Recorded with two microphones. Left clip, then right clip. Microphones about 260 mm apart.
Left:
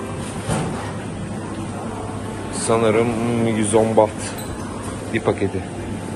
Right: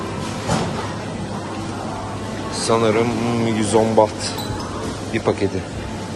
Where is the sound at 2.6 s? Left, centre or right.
Centre.